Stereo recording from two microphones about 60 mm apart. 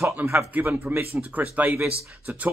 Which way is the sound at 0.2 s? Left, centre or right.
Right.